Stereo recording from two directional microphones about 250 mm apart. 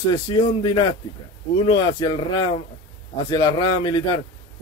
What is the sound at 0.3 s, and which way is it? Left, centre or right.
Speech, centre.